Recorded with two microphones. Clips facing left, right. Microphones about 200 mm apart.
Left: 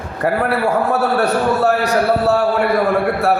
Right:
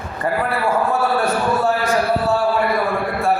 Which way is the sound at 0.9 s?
70° left (ahead or behind).